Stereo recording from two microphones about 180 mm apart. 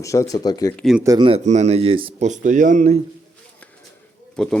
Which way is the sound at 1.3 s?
40° right (ahead or behind).